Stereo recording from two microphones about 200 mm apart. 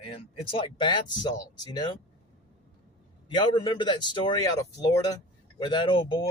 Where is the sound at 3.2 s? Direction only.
20° left (ahead or behind).